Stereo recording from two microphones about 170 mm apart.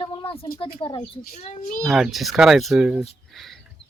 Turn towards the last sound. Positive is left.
turn(degrees=0)  # may be behind; listen again after turning